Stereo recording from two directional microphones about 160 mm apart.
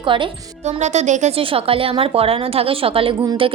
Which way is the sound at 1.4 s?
35° right (ahead or behind).